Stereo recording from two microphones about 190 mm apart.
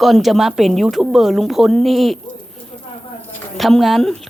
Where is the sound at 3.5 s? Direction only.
Centre (ahead or behind).